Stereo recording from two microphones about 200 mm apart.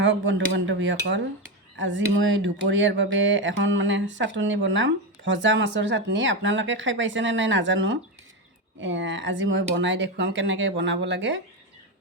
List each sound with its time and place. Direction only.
0.0 s speech: 65° right (ahead or behind)